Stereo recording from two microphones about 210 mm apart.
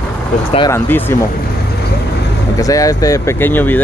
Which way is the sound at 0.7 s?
10° left (ahead or behind).